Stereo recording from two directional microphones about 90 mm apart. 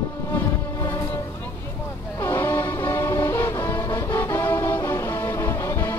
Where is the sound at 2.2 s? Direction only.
30° left (ahead or behind).